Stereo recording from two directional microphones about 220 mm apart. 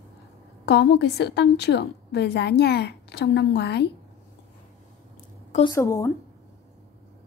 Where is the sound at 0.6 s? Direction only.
50° left (ahead or behind).